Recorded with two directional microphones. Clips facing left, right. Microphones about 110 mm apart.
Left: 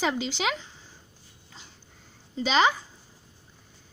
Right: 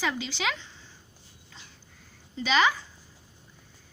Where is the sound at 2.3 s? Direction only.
25° left (ahead or behind).